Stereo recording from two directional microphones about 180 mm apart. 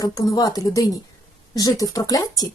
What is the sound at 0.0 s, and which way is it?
Speech, 20° left (ahead or behind).